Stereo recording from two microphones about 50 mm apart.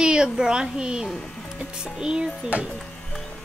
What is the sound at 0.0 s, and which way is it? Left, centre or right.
A woman's voice, centre.